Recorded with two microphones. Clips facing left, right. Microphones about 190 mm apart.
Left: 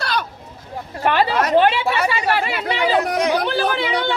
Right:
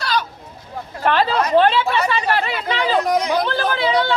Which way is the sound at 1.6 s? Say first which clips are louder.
Right 2 dB; 15° left (ahead or behind).